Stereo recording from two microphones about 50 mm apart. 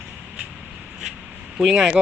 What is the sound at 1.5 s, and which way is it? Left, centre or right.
Speech, centre.